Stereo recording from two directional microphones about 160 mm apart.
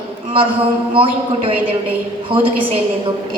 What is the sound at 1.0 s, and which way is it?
Speech, 35° right (ahead or behind).